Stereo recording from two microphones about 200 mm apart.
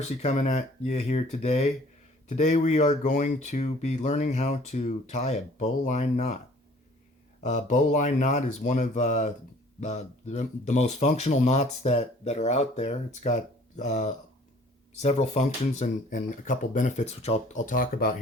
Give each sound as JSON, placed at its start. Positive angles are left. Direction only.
{"t": 0.0, "sound": "speech", "side_deg": 35}
{"t": 7.4, "sound": "speech", "side_deg": 35}